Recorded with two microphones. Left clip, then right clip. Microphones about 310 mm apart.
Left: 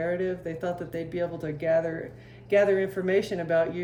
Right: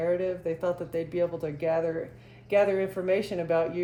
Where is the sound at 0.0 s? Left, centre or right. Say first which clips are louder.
Right 1 dB; centre.